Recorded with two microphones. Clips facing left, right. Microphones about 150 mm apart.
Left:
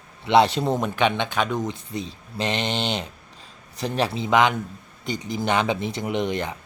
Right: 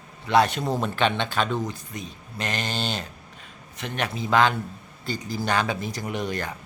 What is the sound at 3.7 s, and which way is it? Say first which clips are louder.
Speech: left 5 dB; 35° left (ahead or behind).